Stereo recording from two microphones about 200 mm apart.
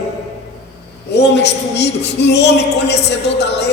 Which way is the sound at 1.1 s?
60° left (ahead or behind).